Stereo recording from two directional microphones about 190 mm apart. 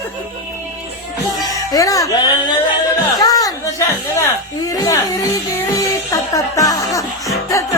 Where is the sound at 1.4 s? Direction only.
20° left (ahead or behind).